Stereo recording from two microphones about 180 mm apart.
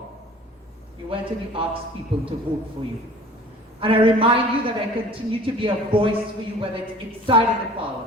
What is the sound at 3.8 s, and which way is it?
Speech, 30° right (ahead or behind).